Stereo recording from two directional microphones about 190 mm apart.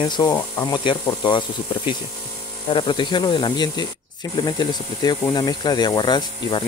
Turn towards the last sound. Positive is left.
turn(degrees=25)  # may be behind; listen again after turning